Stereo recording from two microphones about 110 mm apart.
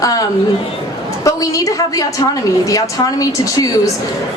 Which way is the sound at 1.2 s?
30° left (ahead or behind).